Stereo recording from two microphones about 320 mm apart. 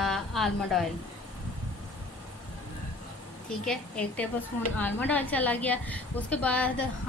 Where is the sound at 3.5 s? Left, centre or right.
Centre.